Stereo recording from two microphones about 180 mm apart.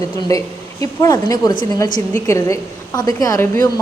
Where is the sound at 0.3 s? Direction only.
20° left (ahead or behind).